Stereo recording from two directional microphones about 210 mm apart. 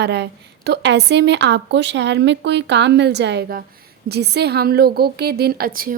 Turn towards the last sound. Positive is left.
turn(degrees=-45)  # may be behind; listen again after turning